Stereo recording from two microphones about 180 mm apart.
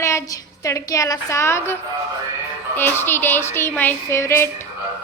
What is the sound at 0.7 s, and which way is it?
Speech, 20° left (ahead or behind).